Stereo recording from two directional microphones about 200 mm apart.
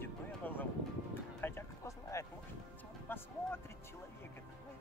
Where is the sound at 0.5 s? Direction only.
10° left (ahead or behind).